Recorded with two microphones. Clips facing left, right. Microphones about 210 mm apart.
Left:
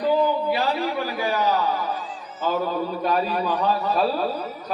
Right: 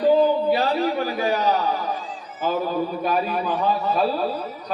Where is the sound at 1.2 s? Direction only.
20° right (ahead or behind).